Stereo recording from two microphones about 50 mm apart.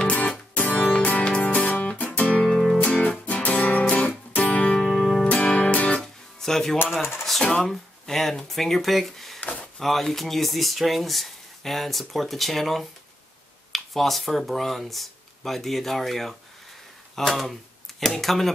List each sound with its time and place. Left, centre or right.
0.0 s music: left
2.4 s music: centre
2.8 s music: left
4.7 s music: centre
5.9 s music: centre
7.6 s speech: centre
9.4 s a sound: left
9.8 s speech: centre